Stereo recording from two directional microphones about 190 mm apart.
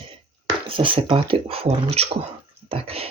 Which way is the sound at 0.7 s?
30° right (ahead or behind).